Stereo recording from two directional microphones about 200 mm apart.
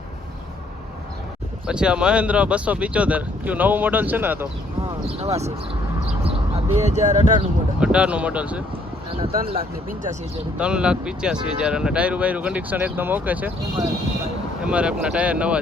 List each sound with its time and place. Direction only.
1.6 s speech: 5° right (ahead or behind)
5.2 s speech: 30° right (ahead or behind)
7.8 s speech: 5° right (ahead or behind)
10.6 s speech: 5° right (ahead or behind)